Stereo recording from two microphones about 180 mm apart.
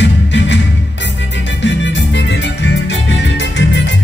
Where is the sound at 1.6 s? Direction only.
90° left.